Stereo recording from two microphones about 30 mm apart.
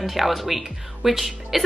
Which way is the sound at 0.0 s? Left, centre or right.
Centre.